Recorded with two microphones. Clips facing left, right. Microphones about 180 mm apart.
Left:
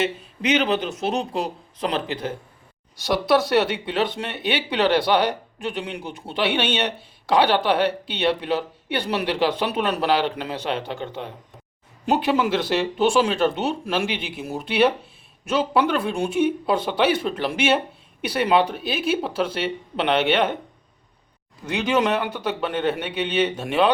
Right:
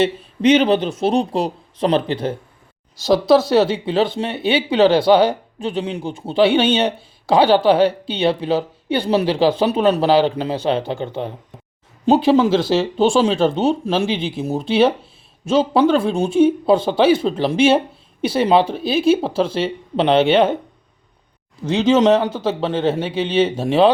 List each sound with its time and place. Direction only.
0.0 s speech: 30° right (ahead or behind)
21.7 s speech: 25° right (ahead or behind)